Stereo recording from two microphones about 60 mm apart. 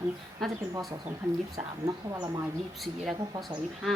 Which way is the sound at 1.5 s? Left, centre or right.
Right.